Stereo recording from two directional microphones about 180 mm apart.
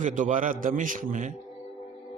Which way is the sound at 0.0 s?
45° right (ahead or behind).